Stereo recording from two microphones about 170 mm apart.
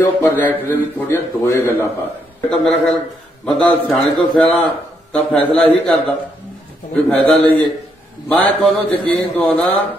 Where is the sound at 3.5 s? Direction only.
Centre (ahead or behind).